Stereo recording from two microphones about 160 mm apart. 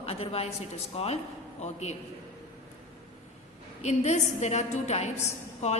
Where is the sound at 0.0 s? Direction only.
40° left (ahead or behind).